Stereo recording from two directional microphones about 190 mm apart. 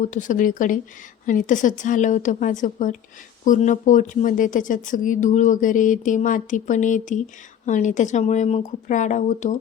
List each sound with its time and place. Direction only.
0.0 s speech: 40° left (ahead or behind)